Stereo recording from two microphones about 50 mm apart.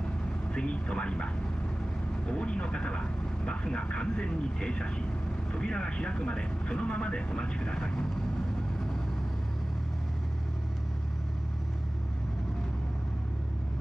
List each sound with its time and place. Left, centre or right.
0.5 s speech: left